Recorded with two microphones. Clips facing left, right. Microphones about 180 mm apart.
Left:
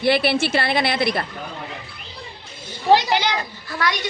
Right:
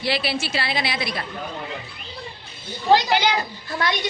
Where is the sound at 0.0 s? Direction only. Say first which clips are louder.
Left 6 dB; 55° left (ahead or behind).